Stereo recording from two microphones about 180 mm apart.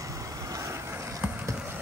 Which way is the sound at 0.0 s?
20° right (ahead or behind).